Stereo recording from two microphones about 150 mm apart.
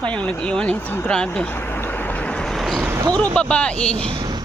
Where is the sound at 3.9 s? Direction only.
35° right (ahead or behind).